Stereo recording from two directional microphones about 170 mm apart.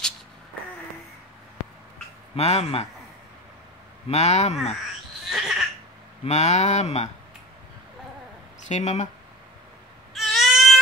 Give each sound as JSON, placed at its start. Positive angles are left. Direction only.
{"t": 2.3, "sound": "speech", "side_deg": 40}
{"t": 4.1, "sound": "speech", "side_deg": 40}
{"t": 5.3, "sound": "a sound", "side_deg": -5}
{"t": 6.2, "sound": "speech", "side_deg": 40}
{"t": 8.6, "sound": "speech", "side_deg": 40}
{"t": 10.1, "sound": "cat", "side_deg": 0}